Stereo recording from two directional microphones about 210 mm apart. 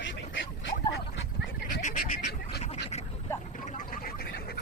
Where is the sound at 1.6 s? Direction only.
35° left (ahead or behind).